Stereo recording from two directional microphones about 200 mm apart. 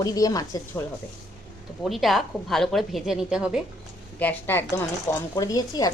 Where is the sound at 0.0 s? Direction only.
20° left (ahead or behind).